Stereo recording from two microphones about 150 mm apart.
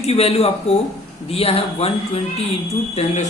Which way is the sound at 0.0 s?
40° left (ahead or behind).